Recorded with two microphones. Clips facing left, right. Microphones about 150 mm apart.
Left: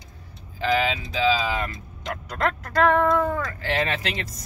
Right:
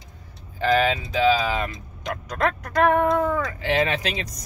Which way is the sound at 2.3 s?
15° right (ahead or behind).